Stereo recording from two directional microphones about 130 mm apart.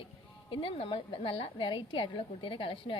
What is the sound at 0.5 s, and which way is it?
A woman's voice, 45° left (ahead or behind).